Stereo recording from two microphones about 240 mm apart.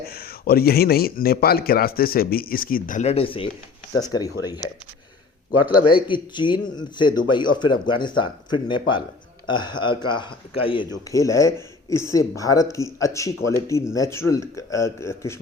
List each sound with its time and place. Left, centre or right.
0.1 s a man's voice: left; by 4.7 s centre
5.8 s a man's voice: left